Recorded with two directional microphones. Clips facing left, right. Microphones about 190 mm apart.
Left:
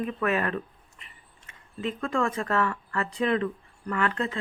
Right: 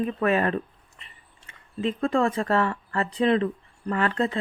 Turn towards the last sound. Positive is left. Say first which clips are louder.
# right 3 dB
turn(degrees=-35)  # may be behind; listen again after turning